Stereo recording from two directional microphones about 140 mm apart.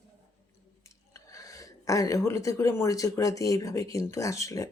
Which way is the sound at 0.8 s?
25° left (ahead or behind).